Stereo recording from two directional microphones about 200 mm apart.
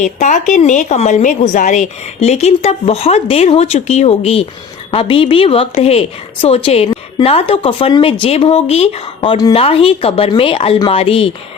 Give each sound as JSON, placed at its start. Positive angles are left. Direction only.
{"t": 0.0, "sound": "a woman's voice", "side_deg": 40}